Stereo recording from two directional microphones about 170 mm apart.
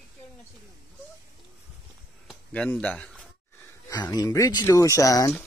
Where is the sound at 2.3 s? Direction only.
5° left (ahead or behind).